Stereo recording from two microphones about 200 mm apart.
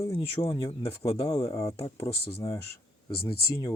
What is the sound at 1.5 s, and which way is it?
Mantra, 15° left (ahead or behind).